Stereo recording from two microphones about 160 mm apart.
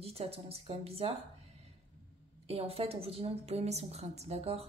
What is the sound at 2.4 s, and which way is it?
Speech, 40° right (ahead or behind).